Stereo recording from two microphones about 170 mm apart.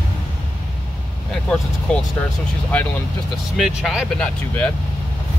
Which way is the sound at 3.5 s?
Centre (ahead or behind).